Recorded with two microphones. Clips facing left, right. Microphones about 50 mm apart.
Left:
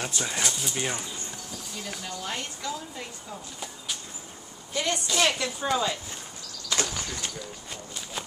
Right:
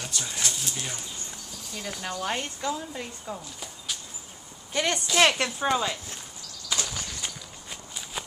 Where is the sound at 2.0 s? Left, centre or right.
Right.